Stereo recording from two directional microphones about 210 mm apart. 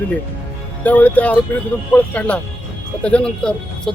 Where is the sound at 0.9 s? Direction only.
5° left (ahead or behind).